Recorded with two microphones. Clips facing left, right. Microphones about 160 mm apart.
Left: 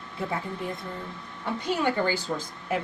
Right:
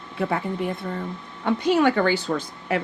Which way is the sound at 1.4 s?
80° right.